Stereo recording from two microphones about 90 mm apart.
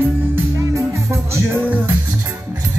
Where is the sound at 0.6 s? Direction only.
35° right (ahead or behind).